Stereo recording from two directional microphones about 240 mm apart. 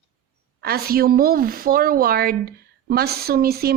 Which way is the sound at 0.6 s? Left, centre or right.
Right.